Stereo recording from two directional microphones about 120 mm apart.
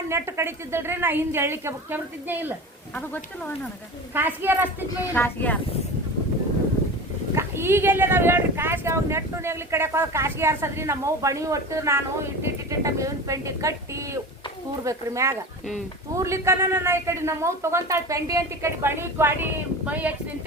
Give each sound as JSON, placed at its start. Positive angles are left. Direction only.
{"t": 0.1, "sound": "speech", "side_deg": -20}
{"t": 2.9, "sound": "speech", "side_deg": 15}
{"t": 4.1, "sound": "a woman's voice", "side_deg": -20}
{"t": 5.1, "sound": "speech", "side_deg": 15}
{"t": 7.3, "sound": "speech", "side_deg": -20}